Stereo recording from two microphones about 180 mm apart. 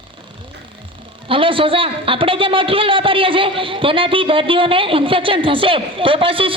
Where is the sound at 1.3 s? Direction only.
30° right (ahead or behind).